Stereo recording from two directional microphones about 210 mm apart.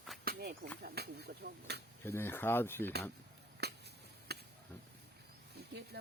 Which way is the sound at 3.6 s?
50° right (ahead or behind).